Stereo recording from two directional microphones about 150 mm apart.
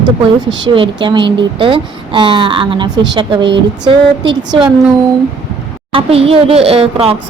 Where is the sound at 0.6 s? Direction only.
35° right (ahead or behind).